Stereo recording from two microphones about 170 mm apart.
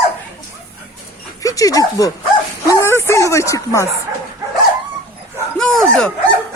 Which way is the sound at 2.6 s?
15° left (ahead or behind).